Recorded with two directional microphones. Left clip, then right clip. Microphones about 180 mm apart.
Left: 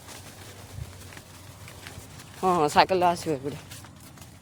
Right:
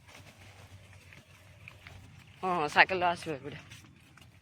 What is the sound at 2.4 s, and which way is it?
Speech, 60° left (ahead or behind).